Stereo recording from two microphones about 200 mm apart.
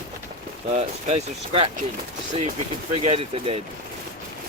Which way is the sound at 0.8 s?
30° right (ahead or behind).